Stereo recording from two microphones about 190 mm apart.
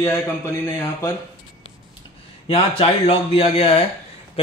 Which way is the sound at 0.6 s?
15° left (ahead or behind).